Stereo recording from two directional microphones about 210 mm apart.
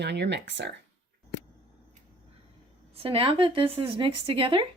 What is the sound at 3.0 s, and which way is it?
Speech, 25° right (ahead or behind).